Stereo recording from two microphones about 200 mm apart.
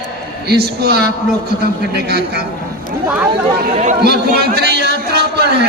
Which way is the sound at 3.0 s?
5° right (ahead or behind).